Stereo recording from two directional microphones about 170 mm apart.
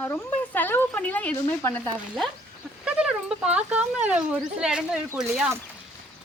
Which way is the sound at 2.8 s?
5° right (ahead or behind).